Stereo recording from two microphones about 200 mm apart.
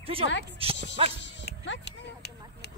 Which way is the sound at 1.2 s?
60° left (ahead or behind).